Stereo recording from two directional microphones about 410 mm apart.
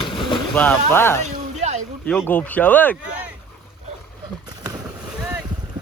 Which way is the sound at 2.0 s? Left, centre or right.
Centre.